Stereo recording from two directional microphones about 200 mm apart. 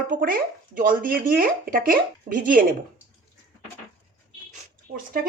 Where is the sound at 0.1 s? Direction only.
45° right (ahead or behind).